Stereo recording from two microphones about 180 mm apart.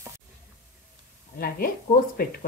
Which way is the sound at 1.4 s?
55° left (ahead or behind).